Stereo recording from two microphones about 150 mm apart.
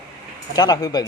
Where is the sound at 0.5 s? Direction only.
25° left (ahead or behind).